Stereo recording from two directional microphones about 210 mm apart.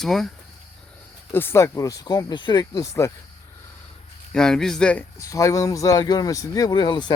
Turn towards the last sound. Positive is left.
turn(degrees=20)  # may be behind; listen again after turning